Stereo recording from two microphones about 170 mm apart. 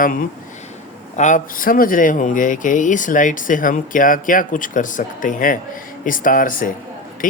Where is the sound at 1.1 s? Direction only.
45° left (ahead or behind).